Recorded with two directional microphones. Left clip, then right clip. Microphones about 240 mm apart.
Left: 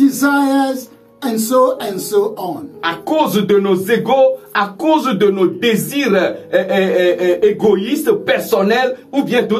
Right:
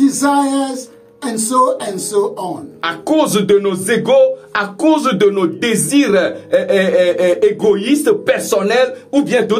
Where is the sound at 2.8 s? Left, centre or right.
Right.